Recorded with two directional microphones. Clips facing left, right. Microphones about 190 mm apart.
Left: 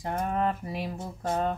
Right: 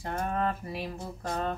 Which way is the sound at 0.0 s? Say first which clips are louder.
Left 2 dB; 15° left (ahead or behind).